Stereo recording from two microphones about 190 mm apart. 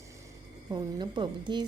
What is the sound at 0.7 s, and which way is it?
Speech, 25° right (ahead or behind).